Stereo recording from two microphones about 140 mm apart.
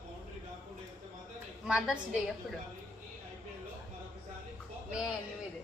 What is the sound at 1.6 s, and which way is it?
Speech, 5° right (ahead or behind).